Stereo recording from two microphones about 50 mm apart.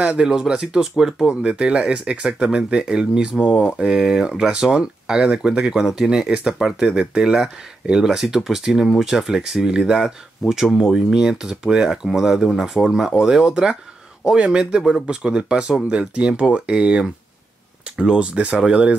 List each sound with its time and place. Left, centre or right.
0.2 s speech: centre
1.4 s speech: right